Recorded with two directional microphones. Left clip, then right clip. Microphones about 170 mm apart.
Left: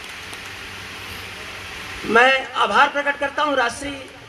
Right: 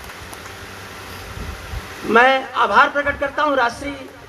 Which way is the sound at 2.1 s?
75° left (ahead or behind).